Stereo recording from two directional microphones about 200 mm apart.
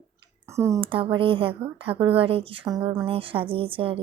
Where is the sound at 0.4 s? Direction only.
15° right (ahead or behind).